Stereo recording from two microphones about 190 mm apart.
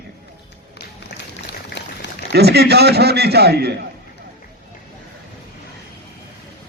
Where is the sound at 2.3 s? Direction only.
60° right (ahead or behind).